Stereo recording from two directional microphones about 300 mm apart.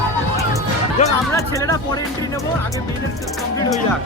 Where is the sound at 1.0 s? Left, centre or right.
Left.